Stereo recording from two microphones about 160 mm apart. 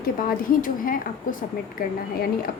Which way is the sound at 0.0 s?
65° left (ahead or behind).